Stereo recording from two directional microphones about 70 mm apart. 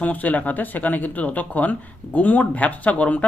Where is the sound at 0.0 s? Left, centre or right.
Left.